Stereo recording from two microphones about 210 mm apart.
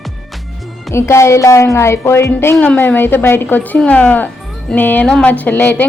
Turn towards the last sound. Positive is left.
turn(degrees=10)  # may be behind; listen again after turning